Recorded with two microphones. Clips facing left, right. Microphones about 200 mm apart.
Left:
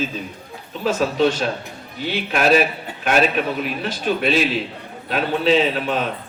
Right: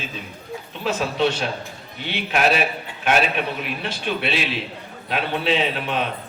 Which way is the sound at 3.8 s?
40° left (ahead or behind).